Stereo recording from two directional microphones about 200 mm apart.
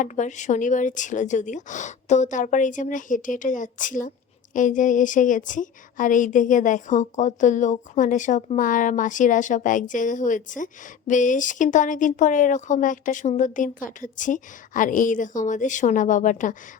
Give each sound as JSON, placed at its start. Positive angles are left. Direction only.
{"t": 0.0, "sound": "a woman's voice", "side_deg": 40}